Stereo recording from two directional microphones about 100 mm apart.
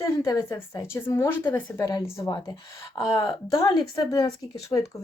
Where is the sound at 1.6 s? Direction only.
40° left (ahead or behind).